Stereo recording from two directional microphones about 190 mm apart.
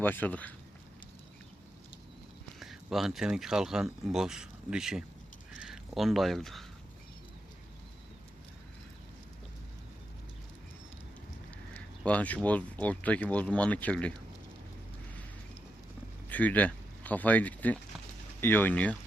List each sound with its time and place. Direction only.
0.0 s speech: 10° left (ahead or behind)
2.6 s speech: centre (ahead or behind)
11.7 s speech: 5° left (ahead or behind)
16.3 s speech: 10° left (ahead or behind)